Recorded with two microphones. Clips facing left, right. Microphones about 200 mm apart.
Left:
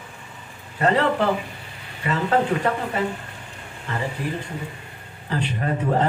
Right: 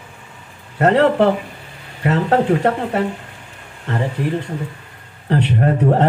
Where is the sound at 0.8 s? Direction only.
65° right (ahead or behind).